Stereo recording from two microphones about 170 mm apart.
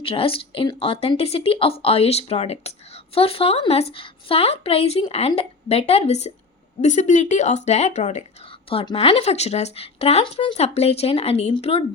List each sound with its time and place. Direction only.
0.0 s speech: 35° left (ahead or behind)
8.7 s speech: 30° left (ahead or behind)